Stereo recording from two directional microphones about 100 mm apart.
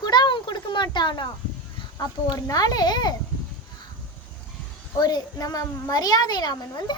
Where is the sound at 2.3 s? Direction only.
35° left (ahead or behind).